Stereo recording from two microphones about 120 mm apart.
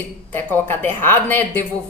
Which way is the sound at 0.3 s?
15° left (ahead or behind).